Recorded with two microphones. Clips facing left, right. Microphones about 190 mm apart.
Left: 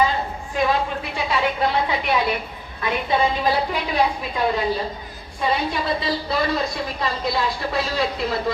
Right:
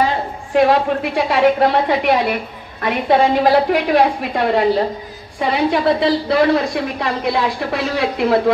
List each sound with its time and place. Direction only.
0.6 s a woman's voice: 70° right (ahead or behind)